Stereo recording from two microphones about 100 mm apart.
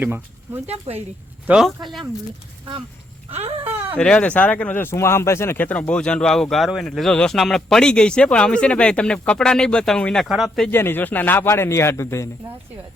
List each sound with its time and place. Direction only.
0.0 s speech: 20° right (ahead or behind)
0.7 s speech: 90° right
1.5 s speech: 5° right (ahead or behind)
3.9 s speech: 10° left (ahead or behind)
10.7 s speech: 20° left (ahead or behind)